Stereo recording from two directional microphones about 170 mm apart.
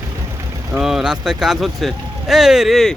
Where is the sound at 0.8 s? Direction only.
5° right (ahead or behind).